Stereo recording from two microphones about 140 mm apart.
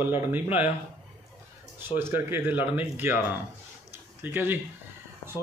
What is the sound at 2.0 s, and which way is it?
Speech, 15° right (ahead or behind).